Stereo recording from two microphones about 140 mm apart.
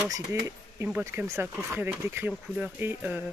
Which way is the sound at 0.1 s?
20° right (ahead or behind).